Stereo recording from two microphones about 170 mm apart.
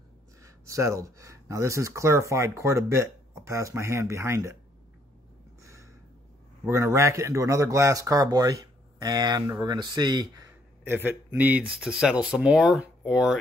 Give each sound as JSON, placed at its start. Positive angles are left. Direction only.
{"t": 0.4, "sound": "speech", "side_deg": -20}
{"t": 5.6, "sound": "a sound", "side_deg": -15}
{"t": 6.7, "sound": "a man's voice", "side_deg": -15}
{"t": 10.8, "sound": "a man's voice", "side_deg": -10}